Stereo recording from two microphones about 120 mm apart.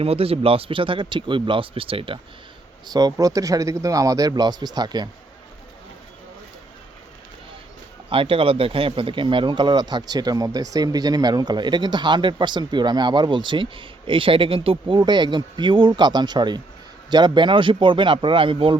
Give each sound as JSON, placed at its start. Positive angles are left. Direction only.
{"t": 0.0, "sound": "speech", "side_deg": -55}
{"t": 2.8, "sound": "speech", "side_deg": -35}
{"t": 8.1, "sound": "speech", "side_deg": -50}